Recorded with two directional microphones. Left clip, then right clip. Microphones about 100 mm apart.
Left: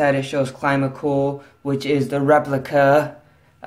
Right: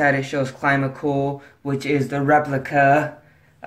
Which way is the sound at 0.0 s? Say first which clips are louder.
Left 1 dB; 10° left (ahead or behind).